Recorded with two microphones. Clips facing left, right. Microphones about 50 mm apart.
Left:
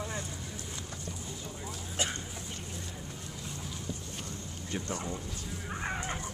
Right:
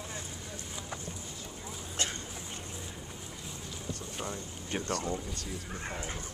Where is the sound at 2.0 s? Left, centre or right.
Centre.